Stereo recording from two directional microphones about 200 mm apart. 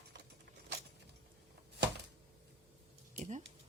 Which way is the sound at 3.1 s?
35° right (ahead or behind).